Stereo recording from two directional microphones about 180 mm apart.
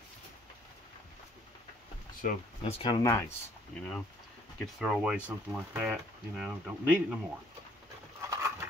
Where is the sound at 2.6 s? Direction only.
25° left (ahead or behind).